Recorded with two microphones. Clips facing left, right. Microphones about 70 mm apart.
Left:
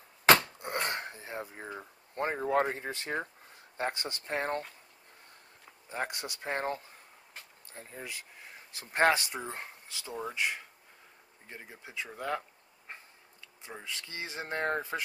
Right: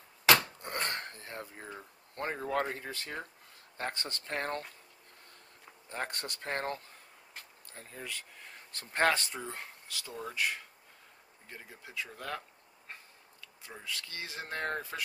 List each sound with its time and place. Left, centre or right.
0.4 s a sound: centre
3.7 s speech: centre
5.9 s speech: centre